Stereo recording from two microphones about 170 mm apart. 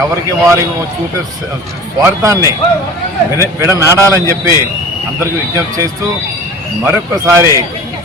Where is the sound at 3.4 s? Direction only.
15° right (ahead or behind).